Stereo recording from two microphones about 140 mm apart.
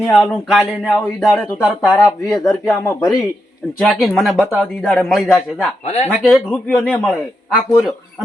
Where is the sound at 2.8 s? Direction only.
20° left (ahead or behind).